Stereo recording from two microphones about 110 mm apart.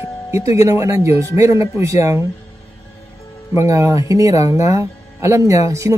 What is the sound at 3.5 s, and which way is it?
Speech, 30° right (ahead or behind).